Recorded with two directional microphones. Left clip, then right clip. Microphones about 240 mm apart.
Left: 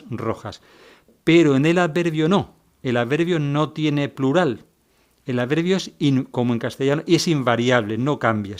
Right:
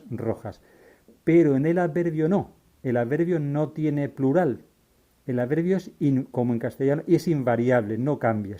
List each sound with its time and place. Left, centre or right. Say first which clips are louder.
0.1 s a man's voice: left 3 dB; left